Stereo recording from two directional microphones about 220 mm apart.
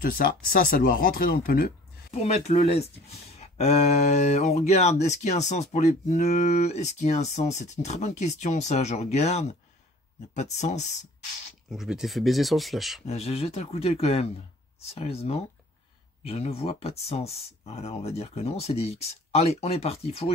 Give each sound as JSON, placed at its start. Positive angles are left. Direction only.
{"t": 0.0, "sound": "speech", "side_deg": 40}
{"t": 2.2, "sound": "speech", "side_deg": 30}
{"t": 11.7, "sound": "speech", "side_deg": 0}
{"t": 13.0, "sound": "speech", "side_deg": 30}